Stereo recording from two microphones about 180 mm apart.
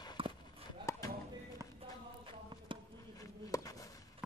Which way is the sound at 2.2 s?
30° right (ahead or behind).